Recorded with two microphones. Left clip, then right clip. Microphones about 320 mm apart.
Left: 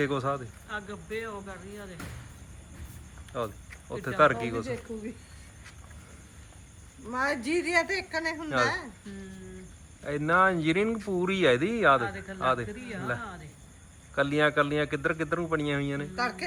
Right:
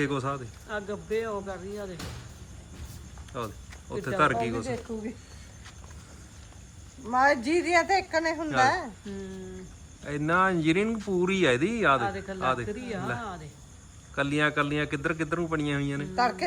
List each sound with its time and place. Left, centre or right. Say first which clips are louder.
0.0 s speech: left 1 dB; centre
0.7 s speech: right 5 dB; centre
3.3 s speech: left 2 dB; centre
7.1 s a woman's voice: right 6 dB; right
10.0 s speech: left 1 dB; centre
16.1 s a woman's voice: right 7 dB; right